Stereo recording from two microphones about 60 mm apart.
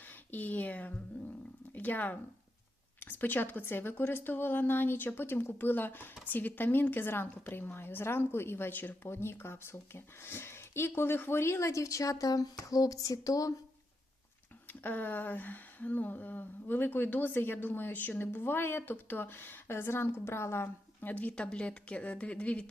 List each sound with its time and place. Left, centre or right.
0.0 s speech: left
9.0 s speech: left
14.7 s speech: left
21.0 s speech: left